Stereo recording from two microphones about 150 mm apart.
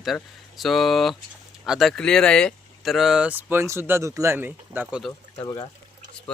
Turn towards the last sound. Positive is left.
turn(degrees=20)  # may be behind; listen again after turning